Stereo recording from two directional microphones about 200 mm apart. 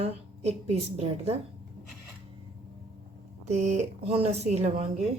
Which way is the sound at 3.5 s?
35° right (ahead or behind).